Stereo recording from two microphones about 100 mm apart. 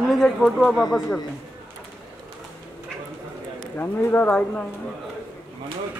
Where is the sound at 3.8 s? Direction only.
20° left (ahead or behind).